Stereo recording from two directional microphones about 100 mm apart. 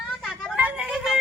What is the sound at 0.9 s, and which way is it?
Music, centre (ahead or behind).